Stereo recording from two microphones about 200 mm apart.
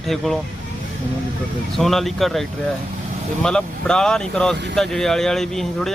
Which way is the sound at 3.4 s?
5° left (ahead or behind).